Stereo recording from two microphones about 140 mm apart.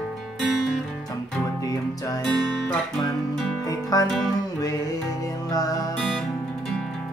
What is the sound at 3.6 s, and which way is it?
Music, 25° left (ahead or behind).